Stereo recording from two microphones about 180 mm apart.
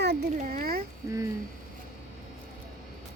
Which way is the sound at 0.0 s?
65° right (ahead or behind).